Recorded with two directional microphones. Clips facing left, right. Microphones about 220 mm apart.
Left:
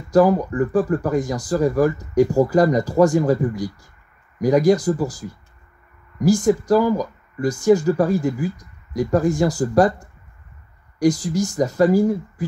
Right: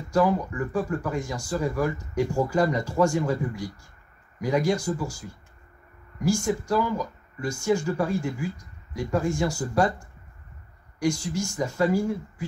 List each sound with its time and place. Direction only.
0.1 s speech: 35° left (ahead or behind)
4.4 s speech: 40° left (ahead or behind)
6.1 s speech: 35° left (ahead or behind)
11.0 s speech: 35° left (ahead or behind)